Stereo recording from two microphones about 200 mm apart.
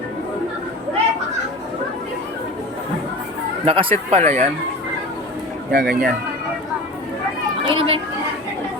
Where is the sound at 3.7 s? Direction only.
30° right (ahead or behind).